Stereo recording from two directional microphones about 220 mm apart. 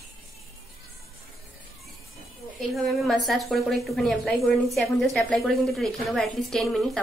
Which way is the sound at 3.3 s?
Centre (ahead or behind).